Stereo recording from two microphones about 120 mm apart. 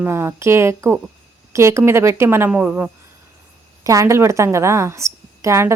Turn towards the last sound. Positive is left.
turn(degrees=-25)  # may be behind; listen again after turning